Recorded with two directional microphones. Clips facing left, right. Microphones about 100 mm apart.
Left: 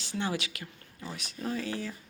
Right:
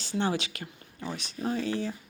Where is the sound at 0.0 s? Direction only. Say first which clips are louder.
Right 4 dB; 30° right (ahead or behind).